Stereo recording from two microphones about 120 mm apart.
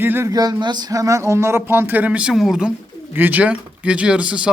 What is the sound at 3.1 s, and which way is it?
Speech, 15° right (ahead or behind).